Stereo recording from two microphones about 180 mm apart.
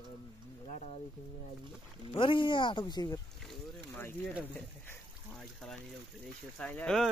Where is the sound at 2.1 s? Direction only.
25° left (ahead or behind).